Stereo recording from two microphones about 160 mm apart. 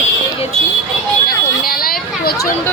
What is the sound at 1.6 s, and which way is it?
Vehicle, 65° left (ahead or behind).